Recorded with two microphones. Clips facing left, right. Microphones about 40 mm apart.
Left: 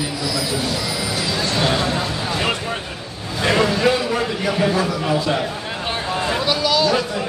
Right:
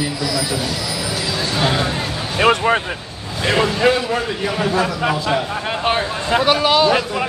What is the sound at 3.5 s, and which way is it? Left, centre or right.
A man's voice, right.